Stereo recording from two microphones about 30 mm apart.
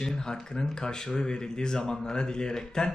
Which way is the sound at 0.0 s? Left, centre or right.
Left.